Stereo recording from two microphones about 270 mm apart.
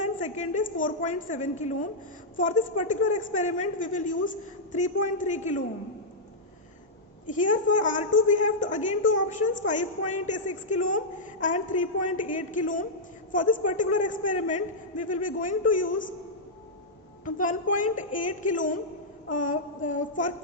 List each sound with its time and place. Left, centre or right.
0.0 s a woman's voice: left
7.5 s a woman's voice: left
17.2 s a woman's voice: left